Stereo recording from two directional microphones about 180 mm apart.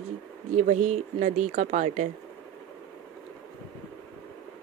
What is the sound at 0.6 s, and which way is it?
Speech, 40° right (ahead or behind).